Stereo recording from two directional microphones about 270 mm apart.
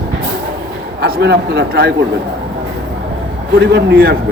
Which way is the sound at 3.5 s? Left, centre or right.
Right.